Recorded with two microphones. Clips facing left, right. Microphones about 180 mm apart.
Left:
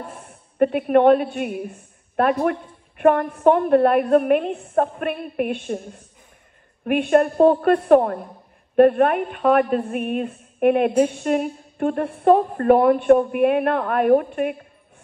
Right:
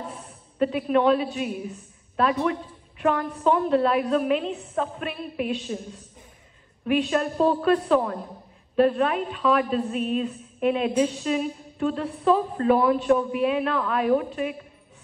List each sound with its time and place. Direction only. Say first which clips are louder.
0.0 s a woman's voice: left 1 dB; 55° left (ahead or behind)